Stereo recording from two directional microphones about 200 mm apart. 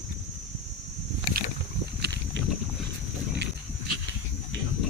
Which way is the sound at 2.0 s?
60° right (ahead or behind).